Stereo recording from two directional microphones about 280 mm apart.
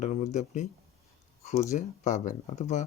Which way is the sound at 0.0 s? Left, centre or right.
Left.